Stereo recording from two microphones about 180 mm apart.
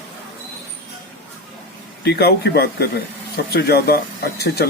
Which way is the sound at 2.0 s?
60° left (ahead or behind).